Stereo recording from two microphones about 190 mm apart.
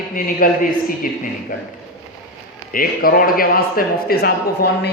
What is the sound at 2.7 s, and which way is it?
A man's voice, 50° left (ahead or behind).